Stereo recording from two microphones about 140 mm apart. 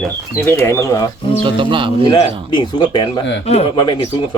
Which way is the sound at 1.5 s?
35° right (ahead or behind).